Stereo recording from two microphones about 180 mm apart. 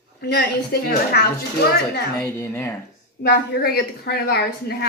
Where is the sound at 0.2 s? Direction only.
60° left (ahead or behind).